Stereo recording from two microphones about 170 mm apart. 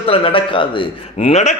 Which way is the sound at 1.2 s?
40° left (ahead or behind).